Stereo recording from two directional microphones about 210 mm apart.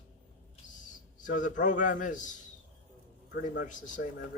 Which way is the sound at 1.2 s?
35° left (ahead or behind).